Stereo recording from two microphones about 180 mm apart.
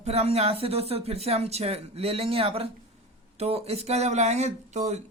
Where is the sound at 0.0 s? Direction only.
35° right (ahead or behind).